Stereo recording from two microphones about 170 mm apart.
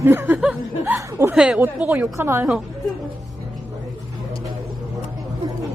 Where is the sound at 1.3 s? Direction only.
5° right (ahead or behind).